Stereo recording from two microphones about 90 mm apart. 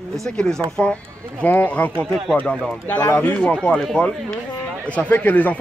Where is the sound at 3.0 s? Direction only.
20° left (ahead or behind).